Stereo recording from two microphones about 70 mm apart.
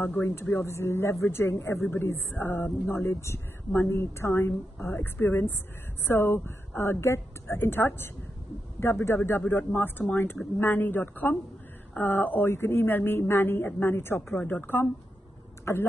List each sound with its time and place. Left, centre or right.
0.0 s speech: left
15.7 s speech: left